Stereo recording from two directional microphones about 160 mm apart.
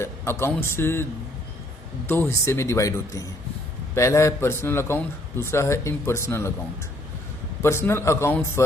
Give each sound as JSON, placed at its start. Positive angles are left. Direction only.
{"t": 0.0, "sound": "a man's voice", "side_deg": 15}
{"t": 2.0, "sound": "a man's voice", "side_deg": 15}
{"t": 7.6, "sound": "a man's voice", "side_deg": 15}